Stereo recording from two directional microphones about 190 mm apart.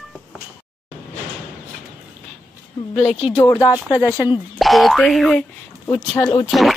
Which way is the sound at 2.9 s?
35° left (ahead or behind).